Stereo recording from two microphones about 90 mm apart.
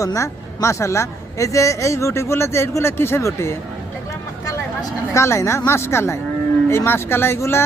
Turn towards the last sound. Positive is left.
turn(degrees=25)  # may be behind; listen again after turning